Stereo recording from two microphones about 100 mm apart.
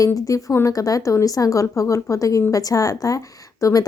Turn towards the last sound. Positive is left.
turn(degrees=35)  # may be behind; listen again after turning